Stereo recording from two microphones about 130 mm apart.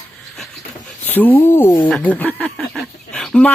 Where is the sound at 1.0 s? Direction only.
15° left (ahead or behind).